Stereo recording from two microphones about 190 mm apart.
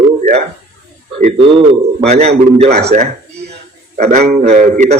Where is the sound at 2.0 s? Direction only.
35° right (ahead or behind).